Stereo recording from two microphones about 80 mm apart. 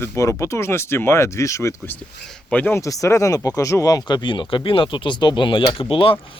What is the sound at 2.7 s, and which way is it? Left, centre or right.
Speech, left.